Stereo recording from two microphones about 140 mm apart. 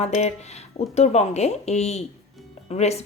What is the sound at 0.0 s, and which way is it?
A woman's voice, 50° left (ahead or behind).